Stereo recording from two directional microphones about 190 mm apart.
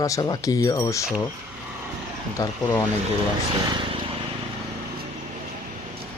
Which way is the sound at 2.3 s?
15° left (ahead or behind).